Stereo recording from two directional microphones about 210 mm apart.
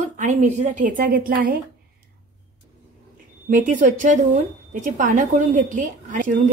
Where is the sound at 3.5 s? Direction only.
40° right (ahead or behind).